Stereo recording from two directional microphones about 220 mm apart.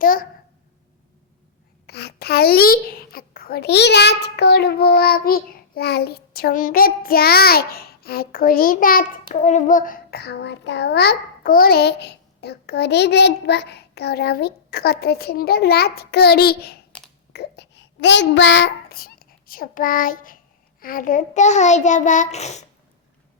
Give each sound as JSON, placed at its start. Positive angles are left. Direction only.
{"t": 0.0, "sound": "a child's voice", "side_deg": 40}
{"t": 1.9, "sound": "a child's voice", "side_deg": 45}
{"t": 16.9, "sound": "a sound", "side_deg": 5}
{"t": 17.3, "sound": "a child's voice", "side_deg": 50}